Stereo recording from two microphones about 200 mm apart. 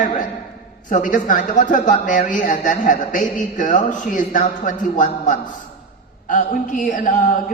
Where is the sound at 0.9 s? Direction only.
40° left (ahead or behind).